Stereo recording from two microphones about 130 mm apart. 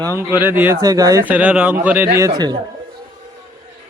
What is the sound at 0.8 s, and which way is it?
Speech, 25° right (ahead or behind).